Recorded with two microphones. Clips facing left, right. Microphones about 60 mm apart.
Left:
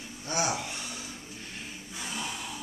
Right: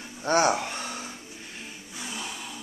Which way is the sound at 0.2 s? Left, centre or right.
Right.